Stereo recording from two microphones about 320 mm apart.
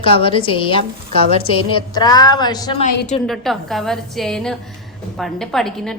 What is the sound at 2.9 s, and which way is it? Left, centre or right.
Speech, left.